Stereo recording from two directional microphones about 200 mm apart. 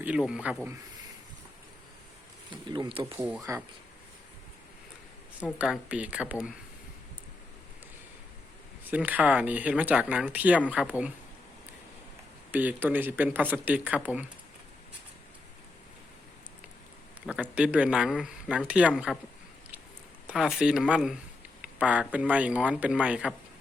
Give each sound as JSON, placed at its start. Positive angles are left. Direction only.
{"t": 0.0, "sound": "speech", "side_deg": -5}
{"t": 2.5, "sound": "speech", "side_deg": -20}
{"t": 5.5, "sound": "speech", "side_deg": -5}
{"t": 8.9, "sound": "speech", "side_deg": -10}
{"t": 12.5, "sound": "speech", "side_deg": -10}
{"t": 17.2, "sound": "speech", "side_deg": -5}
{"t": 20.2, "sound": "speech", "side_deg": 0}